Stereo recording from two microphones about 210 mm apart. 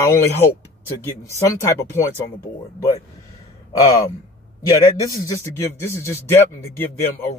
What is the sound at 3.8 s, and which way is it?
Speech, 15° left (ahead or behind).